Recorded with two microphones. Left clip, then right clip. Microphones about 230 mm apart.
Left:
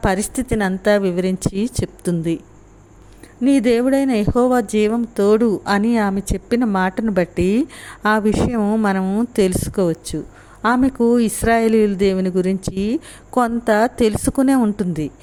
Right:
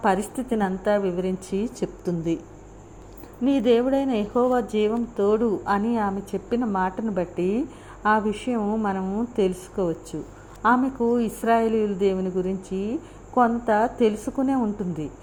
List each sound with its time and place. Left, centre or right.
0.0 s speech: left
3.5 s speech: left